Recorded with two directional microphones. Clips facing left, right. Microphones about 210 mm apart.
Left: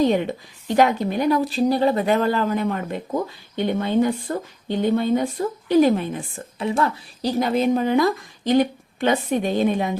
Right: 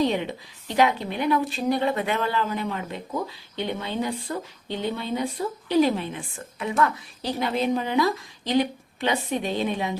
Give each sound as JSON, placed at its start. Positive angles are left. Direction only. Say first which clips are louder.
{"t": 0.0, "sound": "a woman's voice", "louder": "left 5 dB", "side_deg": 50}
{"t": 6.6, "sound": "a woman's voice", "louder": "left 2 dB", "side_deg": 30}